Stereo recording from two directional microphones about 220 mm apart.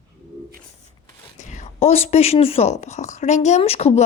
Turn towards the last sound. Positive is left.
turn(degrees=30)  # may be behind; listen again after turning